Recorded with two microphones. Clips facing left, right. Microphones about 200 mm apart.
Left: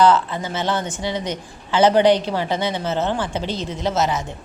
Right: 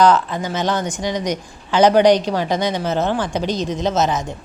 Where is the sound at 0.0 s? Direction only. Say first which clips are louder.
Right 1 dB; 15° right (ahead or behind).